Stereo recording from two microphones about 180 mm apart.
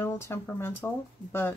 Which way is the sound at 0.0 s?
15° left (ahead or behind).